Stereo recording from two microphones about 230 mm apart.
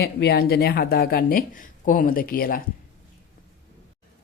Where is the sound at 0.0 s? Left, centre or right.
Left.